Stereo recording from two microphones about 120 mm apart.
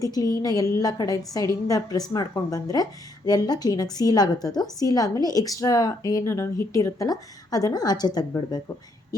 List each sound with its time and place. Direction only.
0.0 s a woman's voice: 30° left (ahead or behind)